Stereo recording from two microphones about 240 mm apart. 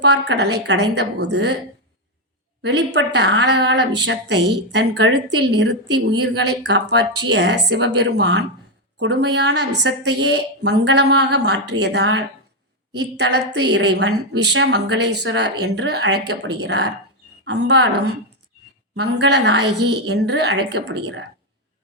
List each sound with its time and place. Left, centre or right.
0.0 s a woman's voice: right
2.6 s a woman's voice: right